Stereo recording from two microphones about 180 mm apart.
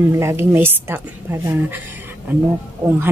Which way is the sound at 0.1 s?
15° right (ahead or behind).